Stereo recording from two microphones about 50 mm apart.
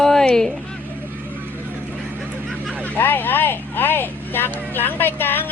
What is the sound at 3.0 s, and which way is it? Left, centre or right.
Speech, left.